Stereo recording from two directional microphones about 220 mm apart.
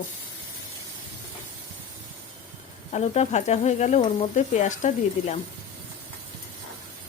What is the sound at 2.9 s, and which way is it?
Speech, 30° left (ahead or behind).